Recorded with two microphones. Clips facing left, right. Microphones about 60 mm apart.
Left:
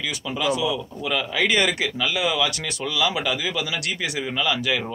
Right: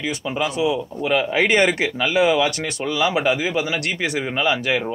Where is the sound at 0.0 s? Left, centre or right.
Right.